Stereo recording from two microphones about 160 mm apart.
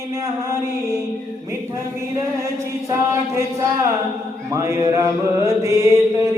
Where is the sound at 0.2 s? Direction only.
20° right (ahead or behind).